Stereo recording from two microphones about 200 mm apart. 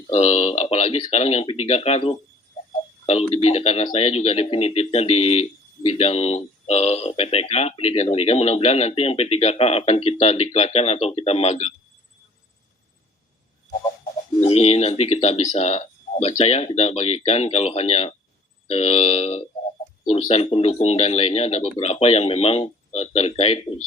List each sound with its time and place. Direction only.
0.1 s speech: 35° left (ahead or behind)
14.4 s speech: 30° left (ahead or behind)